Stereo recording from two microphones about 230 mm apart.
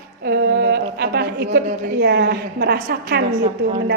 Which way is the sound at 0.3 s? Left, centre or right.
Right.